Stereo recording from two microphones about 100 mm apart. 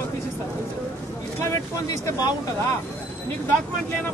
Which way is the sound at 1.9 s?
40° left (ahead or behind).